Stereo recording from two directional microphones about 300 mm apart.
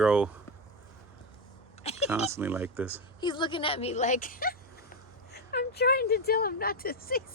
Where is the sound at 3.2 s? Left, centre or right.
Centre.